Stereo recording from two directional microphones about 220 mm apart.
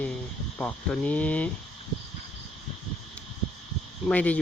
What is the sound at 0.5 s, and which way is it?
Cricket, 5° left (ahead or behind).